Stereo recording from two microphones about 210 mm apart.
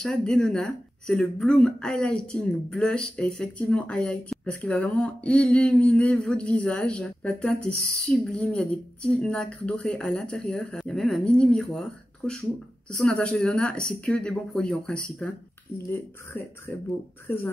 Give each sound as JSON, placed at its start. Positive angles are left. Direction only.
{"t": 0.0, "sound": "speech", "side_deg": 5}
{"t": 12.9, "sound": "speech", "side_deg": 5}